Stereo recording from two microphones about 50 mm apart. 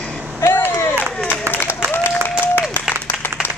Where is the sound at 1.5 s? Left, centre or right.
Left.